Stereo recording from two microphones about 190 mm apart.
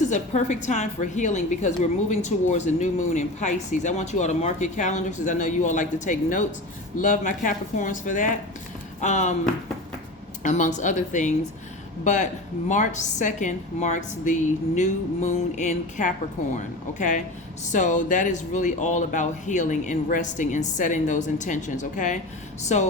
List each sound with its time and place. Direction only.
0.1 s a woman's voice: 40° left (ahead or behind)
10.4 s a woman's voice: 40° left (ahead or behind)